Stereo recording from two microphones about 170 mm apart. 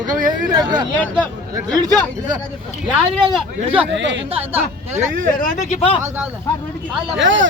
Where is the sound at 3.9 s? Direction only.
90° right.